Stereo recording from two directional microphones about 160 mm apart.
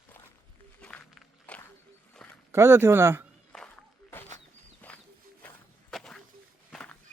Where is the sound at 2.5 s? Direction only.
15° right (ahead or behind).